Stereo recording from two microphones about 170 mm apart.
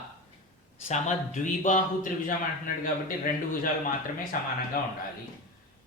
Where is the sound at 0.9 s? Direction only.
45° left (ahead or behind).